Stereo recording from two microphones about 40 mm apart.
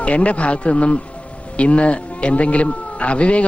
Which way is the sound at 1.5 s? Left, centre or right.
Left.